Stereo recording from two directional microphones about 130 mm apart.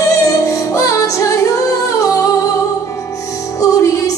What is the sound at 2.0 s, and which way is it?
Singing, 25° left (ahead or behind).